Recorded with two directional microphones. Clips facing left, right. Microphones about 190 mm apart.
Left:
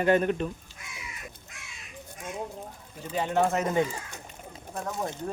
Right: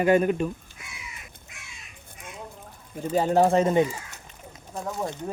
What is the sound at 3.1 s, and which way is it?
Speech, 40° right (ahead or behind).